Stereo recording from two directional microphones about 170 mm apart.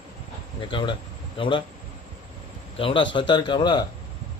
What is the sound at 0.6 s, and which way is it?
A man's voice, 30° left (ahead or behind).